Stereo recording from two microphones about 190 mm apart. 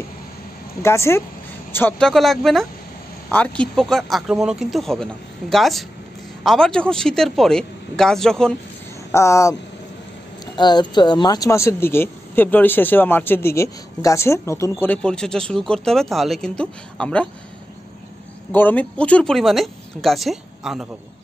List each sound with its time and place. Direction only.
0.8 s speech: 15° left (ahead or behind)
9.1 s speech: 15° left (ahead or behind)
18.5 s speech: 10° left (ahead or behind)